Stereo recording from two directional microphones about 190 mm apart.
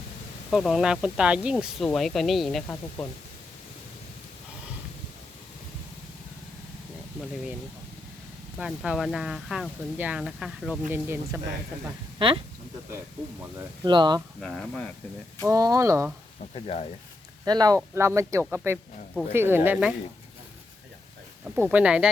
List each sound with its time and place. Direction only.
0.5 s speech: centre (ahead or behind)
8.5 s speech: 5° right (ahead or behind)
12.2 s speech: 25° right (ahead or behind)
13.6 s speech: 25° right (ahead or behind)
14.4 s speech: 5° left (ahead or behind)
15.4 s speech: 20° right (ahead or behind)
16.6 s speech: 30° left (ahead or behind)
17.4 s speech: 20° right (ahead or behind)
21.4 s speech: 5° right (ahead or behind)